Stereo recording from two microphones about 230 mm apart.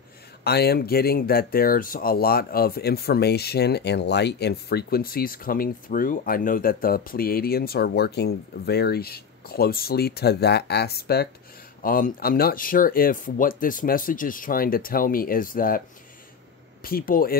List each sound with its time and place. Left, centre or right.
0.4 s speech: left
16.8 s speech: left